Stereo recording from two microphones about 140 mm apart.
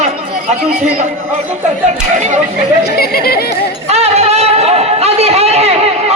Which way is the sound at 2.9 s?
90° left.